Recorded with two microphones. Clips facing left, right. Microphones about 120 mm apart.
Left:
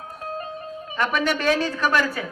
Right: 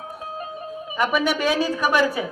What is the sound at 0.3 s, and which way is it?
A man's voice, 10° right (ahead or behind).